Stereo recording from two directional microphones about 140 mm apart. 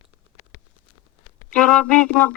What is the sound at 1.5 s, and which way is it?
Speech, 5° left (ahead or behind).